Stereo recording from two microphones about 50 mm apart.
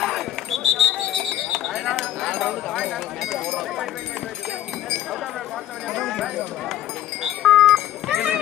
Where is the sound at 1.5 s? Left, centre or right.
Centre.